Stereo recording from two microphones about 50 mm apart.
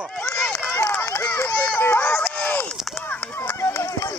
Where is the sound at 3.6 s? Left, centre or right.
Left.